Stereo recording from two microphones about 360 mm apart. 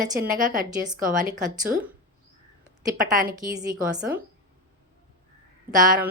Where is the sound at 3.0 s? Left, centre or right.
Right.